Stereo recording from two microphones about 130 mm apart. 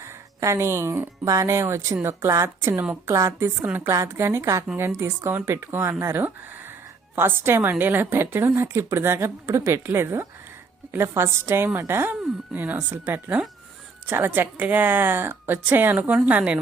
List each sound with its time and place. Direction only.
0.0 s a woman's voice: 20° right (ahead or behind)